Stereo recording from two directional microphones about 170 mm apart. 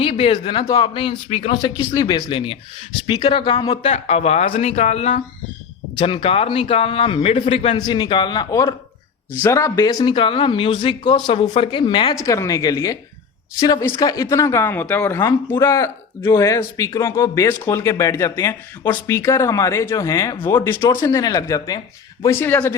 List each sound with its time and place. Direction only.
0.0 s a man's voice: 35° left (ahead or behind)
1.7 s a man's voice: 20° left (ahead or behind); by 5.2 s 40° left (ahead or behind)
6.0 s a man's voice: 30° left (ahead or behind); by 22.7 s 10° left (ahead or behind)